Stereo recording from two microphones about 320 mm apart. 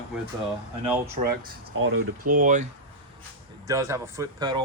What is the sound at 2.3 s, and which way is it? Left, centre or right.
Speech, right.